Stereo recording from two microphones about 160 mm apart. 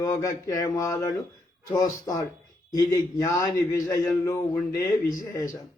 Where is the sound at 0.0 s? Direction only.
20° left (ahead or behind).